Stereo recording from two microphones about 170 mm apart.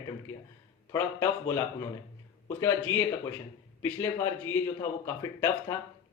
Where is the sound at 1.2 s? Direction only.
15° left (ahead or behind).